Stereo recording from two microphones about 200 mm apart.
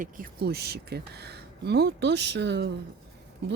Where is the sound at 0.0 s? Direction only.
45° right (ahead or behind).